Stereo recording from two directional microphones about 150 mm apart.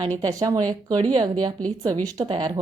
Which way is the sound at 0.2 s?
25° right (ahead or behind).